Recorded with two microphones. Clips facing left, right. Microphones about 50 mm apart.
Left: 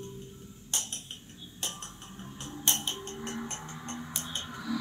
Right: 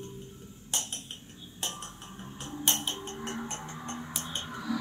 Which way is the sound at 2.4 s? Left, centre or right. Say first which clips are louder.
Right 1 dB; right.